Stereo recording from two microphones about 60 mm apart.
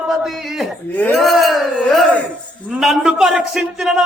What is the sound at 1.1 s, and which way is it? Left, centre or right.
Speech, centre.